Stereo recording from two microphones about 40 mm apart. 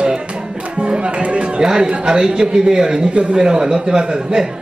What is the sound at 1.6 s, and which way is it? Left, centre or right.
A man's voice, centre.